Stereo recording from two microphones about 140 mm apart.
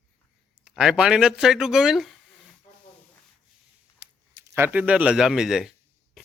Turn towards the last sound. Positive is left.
turn(degrees=-5)  # may be behind; listen again after turning